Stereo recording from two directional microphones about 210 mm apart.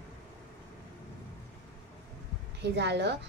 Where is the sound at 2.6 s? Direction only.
55° right (ahead or behind).